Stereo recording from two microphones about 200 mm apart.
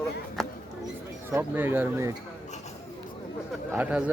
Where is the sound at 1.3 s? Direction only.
10° right (ahead or behind).